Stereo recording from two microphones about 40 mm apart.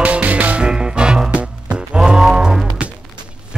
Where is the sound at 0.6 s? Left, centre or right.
Right.